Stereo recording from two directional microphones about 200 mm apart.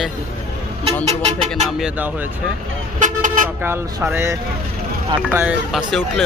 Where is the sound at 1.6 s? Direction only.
5° right (ahead or behind).